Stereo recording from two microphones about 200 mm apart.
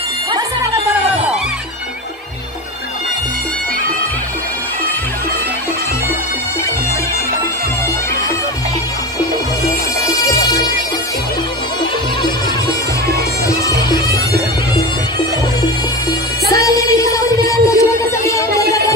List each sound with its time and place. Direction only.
10.0 s bagpipes: 15° left (ahead or behind)
13.1 s bagpipes: 15° left (ahead or behind)
16.4 s music: 15° left (ahead or behind)